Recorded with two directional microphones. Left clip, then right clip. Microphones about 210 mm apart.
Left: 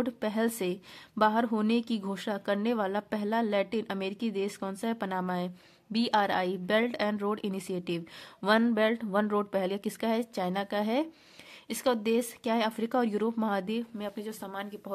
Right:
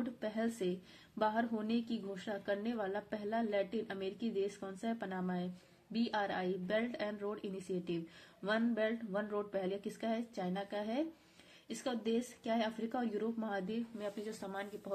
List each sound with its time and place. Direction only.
0.0 s a woman's voice: 40° left (ahead or behind)